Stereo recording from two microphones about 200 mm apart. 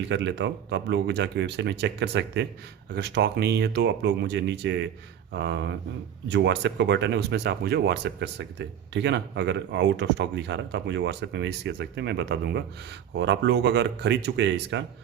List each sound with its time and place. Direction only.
0.1 s speech: 65° right (ahead or behind)